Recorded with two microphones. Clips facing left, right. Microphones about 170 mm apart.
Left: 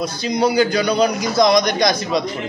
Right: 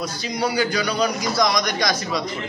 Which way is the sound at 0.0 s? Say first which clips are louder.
Left 6 dB; 20° left (ahead or behind).